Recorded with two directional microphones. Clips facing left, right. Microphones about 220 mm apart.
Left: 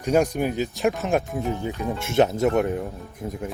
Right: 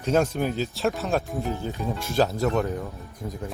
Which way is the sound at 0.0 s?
15° left (ahead or behind).